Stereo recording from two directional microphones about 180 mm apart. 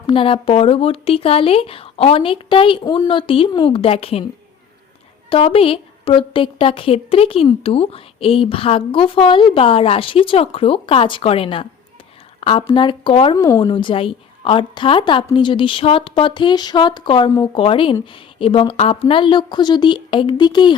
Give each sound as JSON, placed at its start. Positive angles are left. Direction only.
{"t": 0.1, "sound": "a woman's voice", "side_deg": 30}
{"t": 5.3, "sound": "a woman's voice", "side_deg": 30}